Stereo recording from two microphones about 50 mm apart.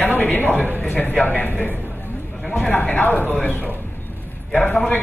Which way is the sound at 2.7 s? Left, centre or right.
Left.